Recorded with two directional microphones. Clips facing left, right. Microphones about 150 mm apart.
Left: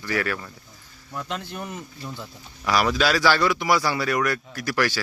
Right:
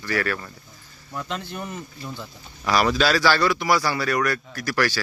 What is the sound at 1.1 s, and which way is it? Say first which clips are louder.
Speech: right 1 dB; centre (ahead or behind).